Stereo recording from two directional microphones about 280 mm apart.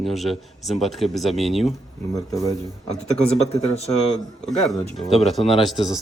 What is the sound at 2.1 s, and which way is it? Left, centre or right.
Speech, centre.